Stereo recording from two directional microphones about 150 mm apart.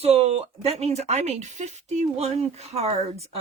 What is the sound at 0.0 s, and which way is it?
Speech, 45° right (ahead or behind).